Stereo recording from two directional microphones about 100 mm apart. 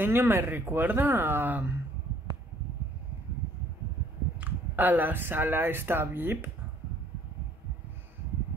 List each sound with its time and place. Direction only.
0.0 s speech: 20° right (ahead or behind)
4.4 s speech: 20° right (ahead or behind)